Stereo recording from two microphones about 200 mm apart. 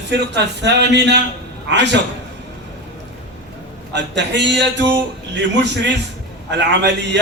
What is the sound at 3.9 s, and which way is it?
A man's voice, 60° right (ahead or behind).